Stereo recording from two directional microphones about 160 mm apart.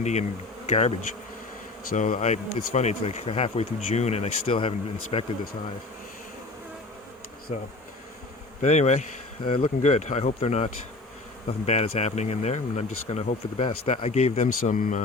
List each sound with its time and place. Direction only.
0.0 s speech: 45° left (ahead or behind)
8.6 s speech: 45° left (ahead or behind)